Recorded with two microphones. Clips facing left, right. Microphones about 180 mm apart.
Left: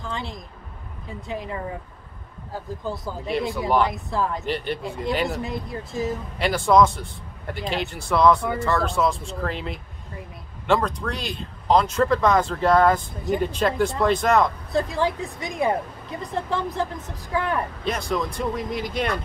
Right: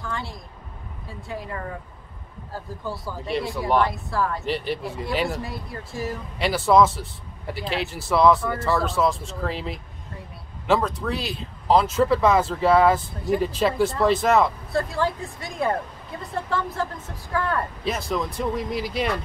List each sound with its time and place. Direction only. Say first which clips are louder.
0.0 s a sound: left 1 dB; 20° left (ahead or behind)
1.0 s speech: left 2 dB; 20° left (ahead or behind)
3.5 s speech: right 1 dB; centre (ahead or behind)
3.8 s speech: even; 20° left (ahead or behind)
4.5 s speech: even; centre (ahead or behind)
5.4 s speech: left 4 dB; 20° left (ahead or behind)
6.3 s speech: even; centre (ahead or behind)
14.7 s speech: left 1 dB; 20° left (ahead or behind)
17.8 s speech: left 1 dB; centre (ahead or behind)